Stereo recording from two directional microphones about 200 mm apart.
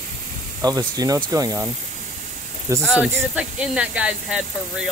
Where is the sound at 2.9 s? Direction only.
5° right (ahead or behind).